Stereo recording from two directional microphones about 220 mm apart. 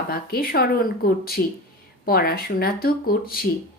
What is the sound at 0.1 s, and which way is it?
Speech, 45° left (ahead or behind).